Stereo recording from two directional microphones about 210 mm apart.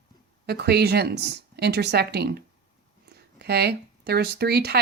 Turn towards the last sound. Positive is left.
turn(degrees=-50)  # may be behind; listen again after turning